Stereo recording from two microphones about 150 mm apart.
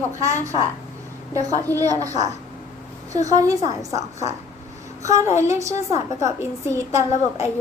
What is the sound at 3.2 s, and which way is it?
Speech, 25° right (ahead or behind).